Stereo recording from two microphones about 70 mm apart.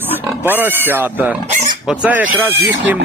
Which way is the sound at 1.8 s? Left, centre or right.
Centre.